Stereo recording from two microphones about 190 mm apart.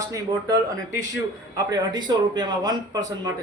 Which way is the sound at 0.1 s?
20° right (ahead or behind).